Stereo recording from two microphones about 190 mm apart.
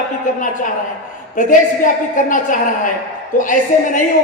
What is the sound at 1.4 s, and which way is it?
A woman's voice, 45° left (ahead or behind).